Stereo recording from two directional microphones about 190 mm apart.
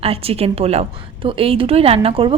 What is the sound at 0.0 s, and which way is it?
A woman's voice, 30° right (ahead or behind).